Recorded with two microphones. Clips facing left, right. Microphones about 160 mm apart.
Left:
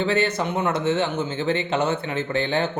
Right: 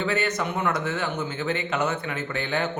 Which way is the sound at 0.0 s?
30° left (ahead or behind).